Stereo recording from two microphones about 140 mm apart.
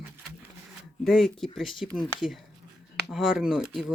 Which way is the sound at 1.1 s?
Centre (ahead or behind).